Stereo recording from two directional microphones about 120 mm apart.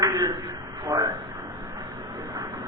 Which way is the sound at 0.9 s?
25° right (ahead or behind).